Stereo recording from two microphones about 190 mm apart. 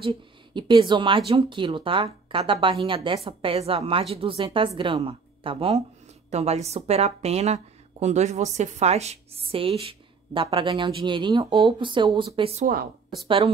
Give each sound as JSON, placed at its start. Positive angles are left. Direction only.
{"t": 0.6, "sound": "a woman's voice", "side_deg": -25}